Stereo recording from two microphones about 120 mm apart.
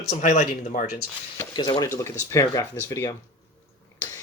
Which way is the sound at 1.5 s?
40° left (ahead or behind).